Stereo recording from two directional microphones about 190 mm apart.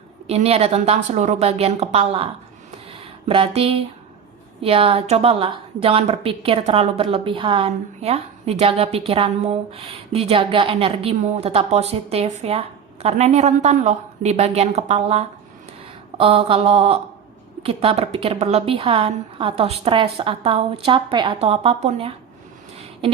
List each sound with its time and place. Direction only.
0.3 s a woman's voice: 35° right (ahead or behind)